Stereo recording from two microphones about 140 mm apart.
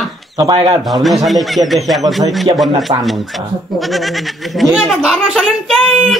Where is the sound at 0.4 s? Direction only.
30° right (ahead or behind).